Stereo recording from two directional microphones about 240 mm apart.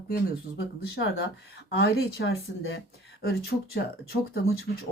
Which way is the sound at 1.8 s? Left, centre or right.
Left.